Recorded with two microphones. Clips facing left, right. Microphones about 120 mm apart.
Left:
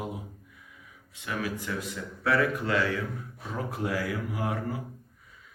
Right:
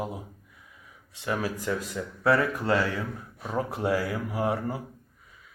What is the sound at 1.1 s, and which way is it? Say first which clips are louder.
Speech: right 3 dB; 35° right (ahead or behind).